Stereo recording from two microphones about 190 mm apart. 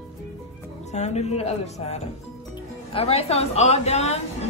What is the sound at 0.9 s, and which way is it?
A woman's voice, 35° left (ahead or behind).